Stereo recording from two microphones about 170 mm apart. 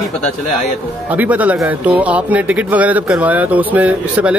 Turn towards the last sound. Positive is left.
turn(degrees=-10)  # may be behind; listen again after turning